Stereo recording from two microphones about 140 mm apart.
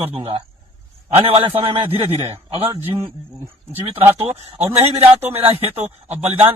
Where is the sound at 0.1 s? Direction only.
40° right (ahead or behind).